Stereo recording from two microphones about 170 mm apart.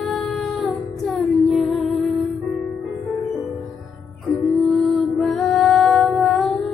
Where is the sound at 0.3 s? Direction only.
Centre (ahead or behind).